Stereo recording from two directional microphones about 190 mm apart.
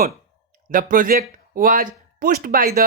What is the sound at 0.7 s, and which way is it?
Speech, 45° right (ahead or behind).